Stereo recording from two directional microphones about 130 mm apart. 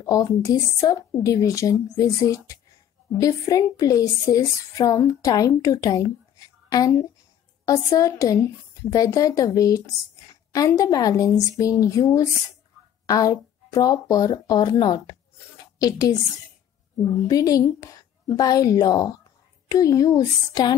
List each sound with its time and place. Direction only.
0.0 s a woman's voice: 25° left (ahead or behind)
17.3 s a woman's voice: 30° left (ahead or behind)